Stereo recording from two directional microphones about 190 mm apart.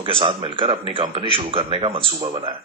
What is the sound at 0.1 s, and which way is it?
Speech, 25° right (ahead or behind).